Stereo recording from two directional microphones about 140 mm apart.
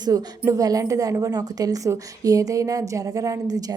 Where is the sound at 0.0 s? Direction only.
25° right (ahead or behind).